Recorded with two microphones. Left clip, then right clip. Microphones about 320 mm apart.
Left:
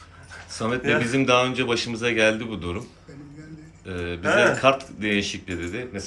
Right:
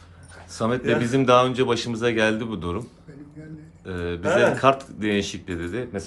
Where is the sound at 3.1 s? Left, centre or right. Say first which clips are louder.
Even; right.